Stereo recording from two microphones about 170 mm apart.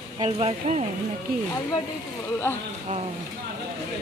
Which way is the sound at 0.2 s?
40° right (ahead or behind).